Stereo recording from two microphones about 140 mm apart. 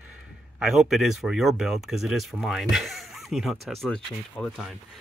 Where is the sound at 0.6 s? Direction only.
Centre (ahead or behind).